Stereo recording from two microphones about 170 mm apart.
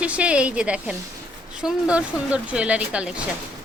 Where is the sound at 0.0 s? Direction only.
5° right (ahead or behind).